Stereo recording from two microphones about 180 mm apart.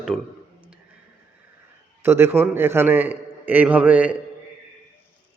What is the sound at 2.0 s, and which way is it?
A man's voice, 15° right (ahead or behind).